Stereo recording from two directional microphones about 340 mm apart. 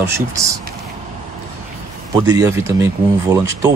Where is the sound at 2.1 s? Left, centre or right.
Centre.